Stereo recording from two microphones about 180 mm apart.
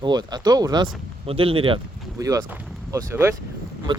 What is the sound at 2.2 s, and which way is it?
Speech, 20° right (ahead or behind).